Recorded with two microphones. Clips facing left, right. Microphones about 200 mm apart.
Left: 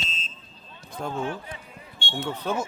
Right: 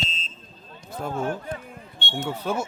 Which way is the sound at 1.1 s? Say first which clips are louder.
Right 4 dB; 45° right (ahead or behind).